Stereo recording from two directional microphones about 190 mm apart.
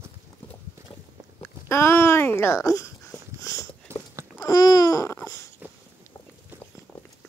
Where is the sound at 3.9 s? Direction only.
15° right (ahead or behind).